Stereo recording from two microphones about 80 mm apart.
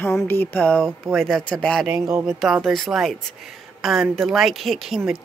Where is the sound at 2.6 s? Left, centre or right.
Centre.